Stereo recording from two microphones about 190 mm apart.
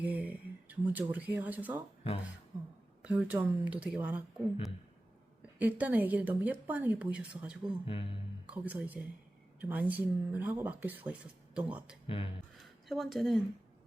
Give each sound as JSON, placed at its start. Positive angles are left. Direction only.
{"t": 0.0, "sound": "speech", "side_deg": -10}
{"t": 3.0, "sound": "speech", "side_deg": -5}
{"t": 5.5, "sound": "speech", "side_deg": -10}
{"t": 7.9, "sound": "speech", "side_deg": 30}
{"t": 8.4, "sound": "speech", "side_deg": -10}
{"t": 12.0, "sound": "speech", "side_deg": 30}
{"t": 12.9, "sound": "speech", "side_deg": 0}